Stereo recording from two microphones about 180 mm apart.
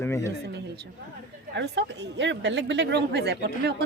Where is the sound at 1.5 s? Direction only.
75° right (ahead or behind).